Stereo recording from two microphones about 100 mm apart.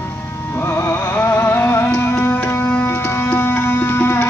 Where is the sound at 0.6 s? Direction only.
25° left (ahead or behind).